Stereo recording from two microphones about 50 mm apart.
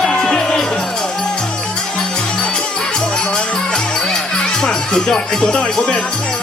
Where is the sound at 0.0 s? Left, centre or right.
Centre.